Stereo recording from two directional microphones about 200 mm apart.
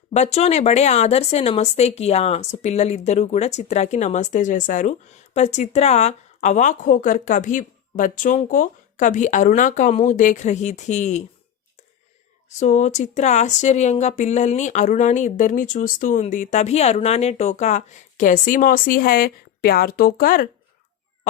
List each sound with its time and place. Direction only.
0.1 s speech: 35° left (ahead or behind)
12.5 s speech: 35° left (ahead or behind)